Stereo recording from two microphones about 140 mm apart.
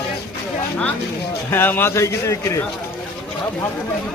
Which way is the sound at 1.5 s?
15° left (ahead or behind).